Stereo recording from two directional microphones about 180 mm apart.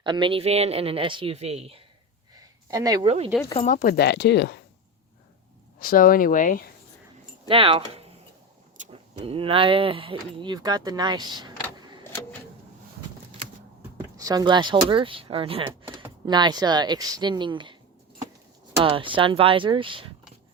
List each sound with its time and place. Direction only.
0.0 s speech: 25° right (ahead or behind)
2.6 s speech: 20° right (ahead or behind)
3.6 s speech: 50° left (ahead or behind); by 4.6 s 65° left (ahead or behind)
5.8 s speech: 50° left (ahead or behind)
7.4 s speech: 30° right (ahead or behind)
14.2 s speech: 20° right (ahead or behind)
15.9 s speech: 20° right (ahead or behind)
18.8 s speech: 30° right (ahead or behind)